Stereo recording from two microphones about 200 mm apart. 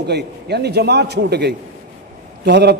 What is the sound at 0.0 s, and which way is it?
A man's voice, 55° right (ahead or behind).